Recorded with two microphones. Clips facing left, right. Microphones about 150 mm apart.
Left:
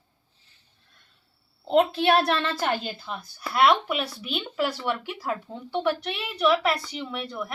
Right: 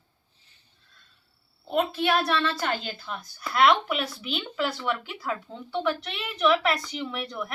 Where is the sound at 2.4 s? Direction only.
20° left (ahead or behind).